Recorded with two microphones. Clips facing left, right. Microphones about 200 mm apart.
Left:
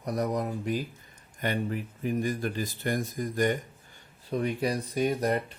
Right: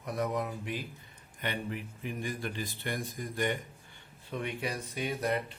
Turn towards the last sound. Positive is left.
turn(degrees=40)  # may be behind; listen again after turning